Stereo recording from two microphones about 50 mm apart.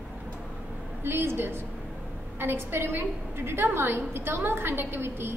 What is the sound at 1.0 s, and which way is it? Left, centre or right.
A woman's voice, right.